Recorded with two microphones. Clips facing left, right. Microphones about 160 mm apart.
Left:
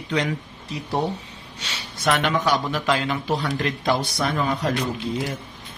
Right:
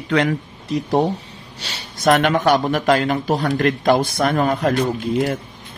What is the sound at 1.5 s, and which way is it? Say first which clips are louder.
Speech: right 1 dB; 35° right (ahead or behind).